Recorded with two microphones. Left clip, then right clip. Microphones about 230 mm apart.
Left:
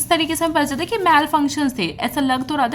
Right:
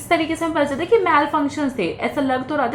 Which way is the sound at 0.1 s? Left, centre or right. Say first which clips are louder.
Left 1 dB; left.